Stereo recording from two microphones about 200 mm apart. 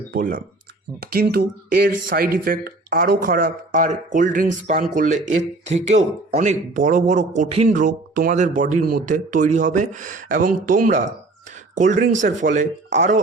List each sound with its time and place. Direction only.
0.1 s speech: 45° right (ahead or behind)